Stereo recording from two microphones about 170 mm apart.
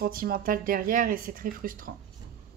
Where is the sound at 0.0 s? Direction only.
60° right (ahead or behind).